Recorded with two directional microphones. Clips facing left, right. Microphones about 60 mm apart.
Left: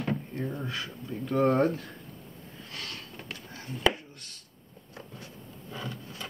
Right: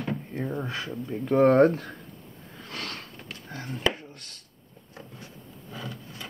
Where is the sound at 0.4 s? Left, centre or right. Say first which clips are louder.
Right 3 dB; right.